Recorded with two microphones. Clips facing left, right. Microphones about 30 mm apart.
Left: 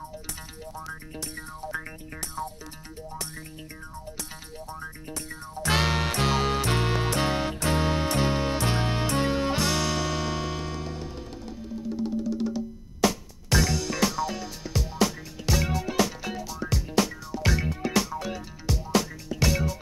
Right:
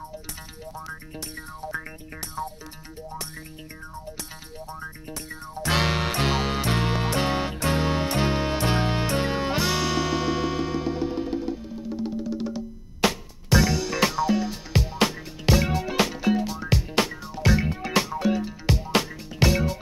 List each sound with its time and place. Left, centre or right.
1.1 s music: centre
4.6 s music: centre
13.0 s music: right
13.5 s music: centre
15.0 s music: right
16.1 s music: right
16.7 s music: right
17.5 s music: right
18.7 s music: right